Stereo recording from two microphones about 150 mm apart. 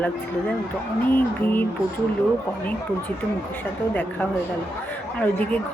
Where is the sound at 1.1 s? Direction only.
10° left (ahead or behind).